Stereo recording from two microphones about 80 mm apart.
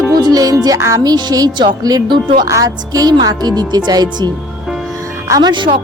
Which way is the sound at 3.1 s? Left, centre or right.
Right.